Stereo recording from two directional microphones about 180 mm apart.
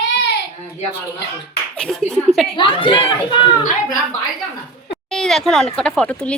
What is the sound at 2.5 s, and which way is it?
A child's voice, 25° left (ahead or behind).